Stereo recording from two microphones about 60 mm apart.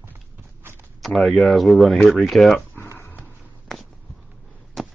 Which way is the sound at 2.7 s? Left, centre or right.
Left.